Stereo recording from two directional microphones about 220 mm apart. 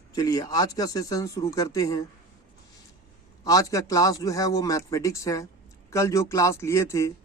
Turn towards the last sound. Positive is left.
turn(degrees=15)  # may be behind; listen again after turning